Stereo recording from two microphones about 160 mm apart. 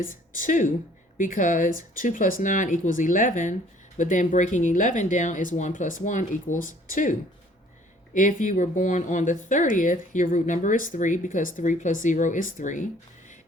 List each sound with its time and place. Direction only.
0.0 s a woman's voice: 55° left (ahead or behind)